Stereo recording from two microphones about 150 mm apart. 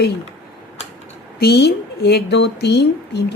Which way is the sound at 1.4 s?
90° left.